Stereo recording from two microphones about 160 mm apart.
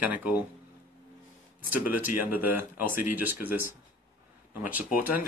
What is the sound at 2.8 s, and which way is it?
Speech, 60° left (ahead or behind).